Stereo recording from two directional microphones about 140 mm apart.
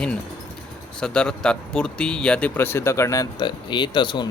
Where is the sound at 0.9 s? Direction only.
5° left (ahead or behind); by 3.2 s 20° left (ahead or behind).